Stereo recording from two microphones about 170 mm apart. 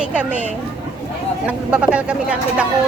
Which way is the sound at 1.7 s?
5° right (ahead or behind).